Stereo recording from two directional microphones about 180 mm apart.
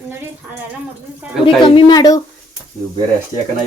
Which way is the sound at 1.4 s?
25° left (ahead or behind).